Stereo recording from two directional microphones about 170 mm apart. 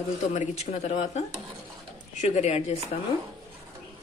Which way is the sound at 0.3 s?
45° left (ahead or behind).